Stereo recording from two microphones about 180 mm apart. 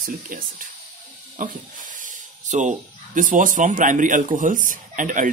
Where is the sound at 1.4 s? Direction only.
45° right (ahead or behind).